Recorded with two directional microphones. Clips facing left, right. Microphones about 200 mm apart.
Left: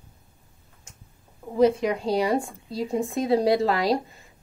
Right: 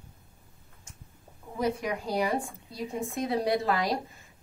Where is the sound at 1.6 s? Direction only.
25° left (ahead or behind).